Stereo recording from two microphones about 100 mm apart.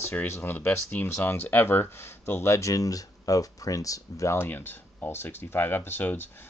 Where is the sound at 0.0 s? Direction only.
20° left (ahead or behind).